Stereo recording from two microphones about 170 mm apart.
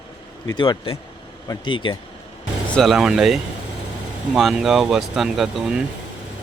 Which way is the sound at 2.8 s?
Centre (ahead or behind).